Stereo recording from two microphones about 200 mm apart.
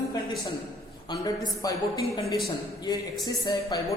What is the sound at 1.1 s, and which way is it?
A man's voice, 20° left (ahead or behind).